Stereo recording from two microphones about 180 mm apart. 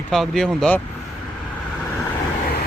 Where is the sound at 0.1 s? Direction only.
5° left (ahead or behind).